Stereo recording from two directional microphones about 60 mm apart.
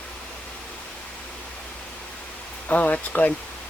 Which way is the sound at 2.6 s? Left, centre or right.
Left.